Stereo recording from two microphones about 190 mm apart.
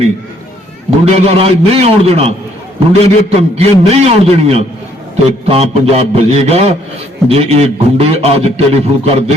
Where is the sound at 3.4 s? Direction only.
35° right (ahead or behind).